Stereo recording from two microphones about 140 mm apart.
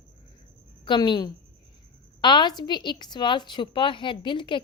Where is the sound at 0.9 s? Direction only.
30° left (ahead or behind).